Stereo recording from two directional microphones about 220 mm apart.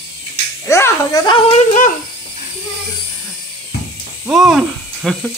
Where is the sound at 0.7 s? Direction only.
15° left (ahead or behind); by 1.9 s 35° left (ahead or behind).